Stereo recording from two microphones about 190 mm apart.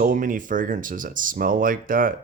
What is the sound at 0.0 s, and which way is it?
Speech, 45° right (ahead or behind).